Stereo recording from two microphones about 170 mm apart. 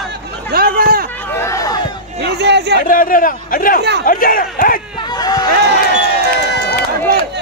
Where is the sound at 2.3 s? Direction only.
80° right.